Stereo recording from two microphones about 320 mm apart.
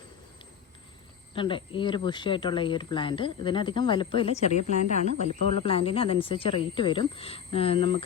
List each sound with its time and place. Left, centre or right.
1.4 s speech: centre